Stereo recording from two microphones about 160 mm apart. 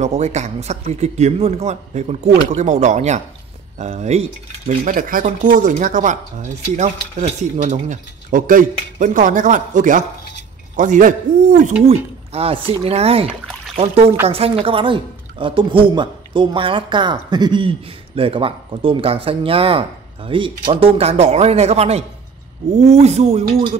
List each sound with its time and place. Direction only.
0.0 s a woman's voice: 45° right (ahead or behind)
23.4 s music: 60° right (ahead or behind)